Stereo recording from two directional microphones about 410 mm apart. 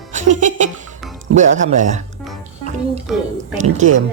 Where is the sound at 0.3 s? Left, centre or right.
Centre.